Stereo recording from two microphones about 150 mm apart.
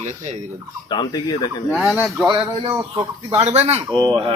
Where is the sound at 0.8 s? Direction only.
30° left (ahead or behind).